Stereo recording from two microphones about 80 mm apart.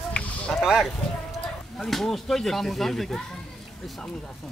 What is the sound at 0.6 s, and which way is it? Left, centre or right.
Speech, centre.